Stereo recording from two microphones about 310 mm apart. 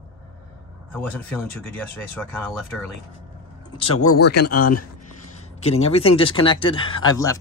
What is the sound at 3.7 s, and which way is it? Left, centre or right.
Speech, centre.